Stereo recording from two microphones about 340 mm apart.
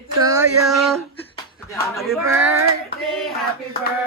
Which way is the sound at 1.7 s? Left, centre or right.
Centre.